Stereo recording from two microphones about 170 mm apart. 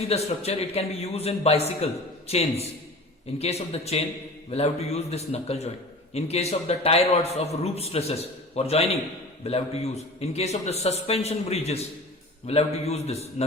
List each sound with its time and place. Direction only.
0.1 s a man's voice: 35° left (ahead or behind)